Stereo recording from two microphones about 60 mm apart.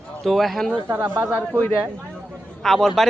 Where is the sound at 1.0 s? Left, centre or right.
Right.